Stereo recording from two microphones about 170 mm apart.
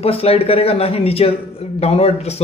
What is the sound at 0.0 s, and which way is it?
Speech, 35° left (ahead or behind).